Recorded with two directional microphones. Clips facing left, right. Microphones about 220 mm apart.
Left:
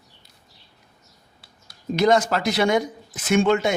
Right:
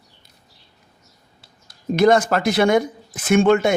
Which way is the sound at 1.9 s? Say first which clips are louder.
Right 3 dB; 55° right (ahead or behind).